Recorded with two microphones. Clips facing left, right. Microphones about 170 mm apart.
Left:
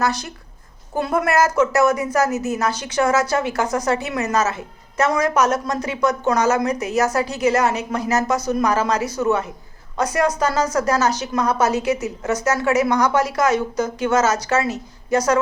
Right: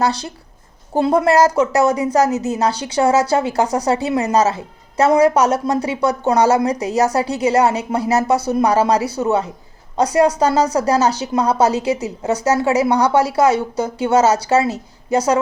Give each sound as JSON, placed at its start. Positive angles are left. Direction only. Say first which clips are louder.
{"t": 0.0, "sound": "a woman's voice", "louder": "right 3 dB", "side_deg": -30}